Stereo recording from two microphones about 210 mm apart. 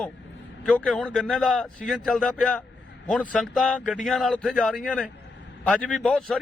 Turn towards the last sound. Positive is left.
turn(degrees=0)  # may be behind; listen again after turning